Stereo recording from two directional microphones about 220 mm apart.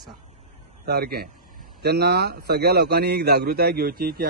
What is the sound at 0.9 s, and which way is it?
A man's voice, 45° right (ahead or behind).